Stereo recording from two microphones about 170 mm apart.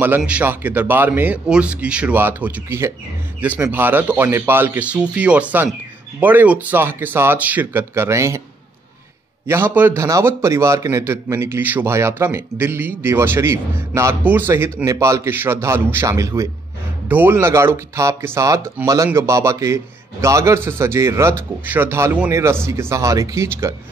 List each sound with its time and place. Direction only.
0.2 s a man's voice: 10° right (ahead or behind)
9.5 s a man's voice: 15° right (ahead or behind)